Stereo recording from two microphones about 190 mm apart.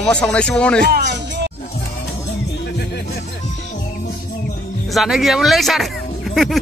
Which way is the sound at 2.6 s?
60° left (ahead or behind).